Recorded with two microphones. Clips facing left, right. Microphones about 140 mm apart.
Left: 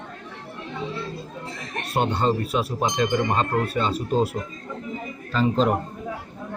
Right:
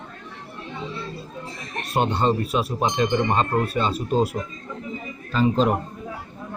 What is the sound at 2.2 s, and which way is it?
Speech, 20° right (ahead or behind).